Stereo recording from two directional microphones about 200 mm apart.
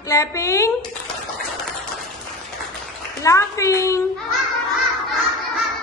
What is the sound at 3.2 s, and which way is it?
Speech, 15° left (ahead or behind).